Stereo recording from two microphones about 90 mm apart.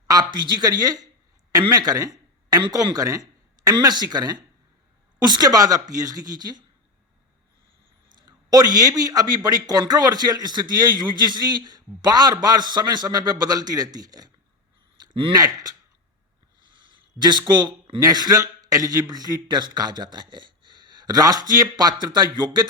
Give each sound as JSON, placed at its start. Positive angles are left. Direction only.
{"t": 0.1, "sound": "a man's voice", "side_deg": -50}
{"t": 8.1, "sound": "a man's voice", "side_deg": -45}
{"t": 14.9, "sound": "a sound", "side_deg": -60}
{"t": 15.4, "sound": "a man's voice", "side_deg": -45}
{"t": 17.2, "sound": "speech", "side_deg": -55}
{"t": 18.0, "sound": "a man's voice", "side_deg": -50}